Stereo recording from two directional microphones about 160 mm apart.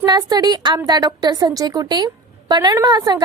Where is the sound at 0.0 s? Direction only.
25° right (ahead or behind).